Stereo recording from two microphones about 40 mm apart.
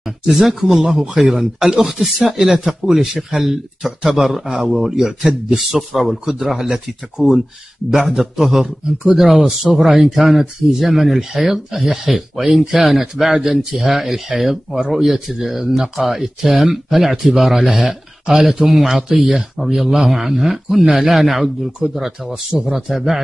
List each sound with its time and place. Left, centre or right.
0.2 s speech: centre
1.9 s a man's voice: centre